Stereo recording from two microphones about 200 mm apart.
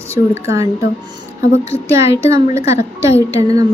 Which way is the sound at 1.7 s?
15° right (ahead or behind).